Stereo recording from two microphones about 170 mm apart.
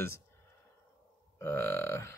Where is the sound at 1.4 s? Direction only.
15° left (ahead or behind).